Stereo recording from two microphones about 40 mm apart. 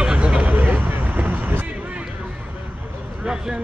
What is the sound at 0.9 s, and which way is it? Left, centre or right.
Vehicle, right.